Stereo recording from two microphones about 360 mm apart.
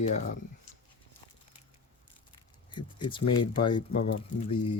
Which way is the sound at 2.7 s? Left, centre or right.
Centre.